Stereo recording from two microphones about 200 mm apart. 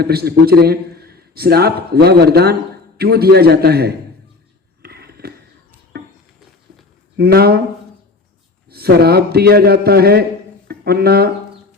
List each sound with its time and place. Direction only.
0.0 s a man's voice: 50° right (ahead or behind)
4.8 s a sound: 50° right (ahead or behind)
7.2 s a man's voice: 50° right (ahead or behind)
8.7 s a man's voice: 50° right (ahead or behind)